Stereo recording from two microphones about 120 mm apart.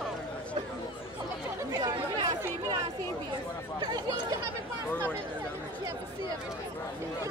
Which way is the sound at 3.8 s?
35° right (ahead or behind).